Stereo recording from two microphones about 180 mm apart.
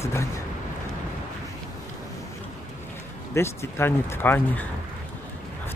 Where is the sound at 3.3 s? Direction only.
15° left (ahead or behind).